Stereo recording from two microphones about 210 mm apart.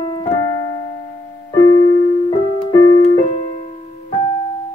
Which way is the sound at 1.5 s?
20° left (ahead or behind).